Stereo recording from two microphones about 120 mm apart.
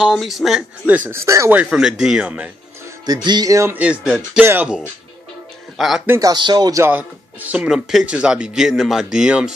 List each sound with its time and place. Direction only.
0.0 s speech: centre (ahead or behind)
0.8 s speech: 15° right (ahead or behind)
1.6 s speech: 5° right (ahead or behind)
3.3 s speech: 30° right (ahead or behind)
3.7 s speech: 10° right (ahead or behind)
5.8 s a man's voice: centre (ahead or behind)
6.0 s speech: 25° right (ahead or behind)
6.3 s speech: 35° right (ahead or behind)
6.8 s speech: 15° right (ahead or behind)